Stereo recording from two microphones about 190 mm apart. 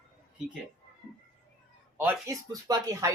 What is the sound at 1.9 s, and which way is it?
Speech, 15° right (ahead or behind).